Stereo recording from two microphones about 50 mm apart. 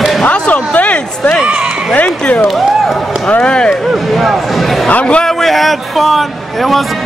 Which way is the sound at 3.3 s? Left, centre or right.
Left.